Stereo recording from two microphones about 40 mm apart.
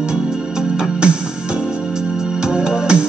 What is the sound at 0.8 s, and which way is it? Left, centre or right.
Music, right.